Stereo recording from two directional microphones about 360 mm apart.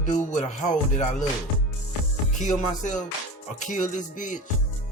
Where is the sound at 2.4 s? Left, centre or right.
Centre.